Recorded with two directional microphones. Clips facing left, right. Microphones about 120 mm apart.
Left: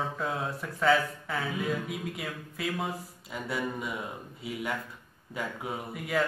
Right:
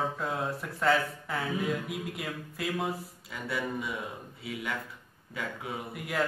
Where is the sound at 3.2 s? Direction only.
25° left (ahead or behind).